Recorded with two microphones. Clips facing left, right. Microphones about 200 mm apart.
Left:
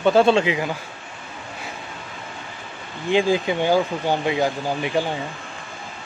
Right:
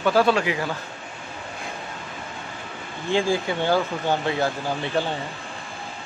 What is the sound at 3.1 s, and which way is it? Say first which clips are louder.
Speech: left 3 dB; 15° left (ahead or behind).